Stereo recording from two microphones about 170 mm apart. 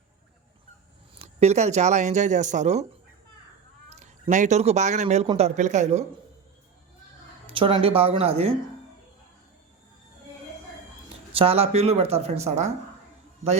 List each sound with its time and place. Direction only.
1.1 s speech: 40° right (ahead or behind)
3.8 s speech: 40° right (ahead or behind)
7.4 s speech: 30° right (ahead or behind)
11.3 s speech: 35° right (ahead or behind)